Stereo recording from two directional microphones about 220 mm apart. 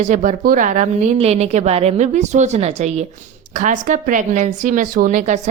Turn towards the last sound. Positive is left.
turn(degrees=-35)  # may be behind; listen again after turning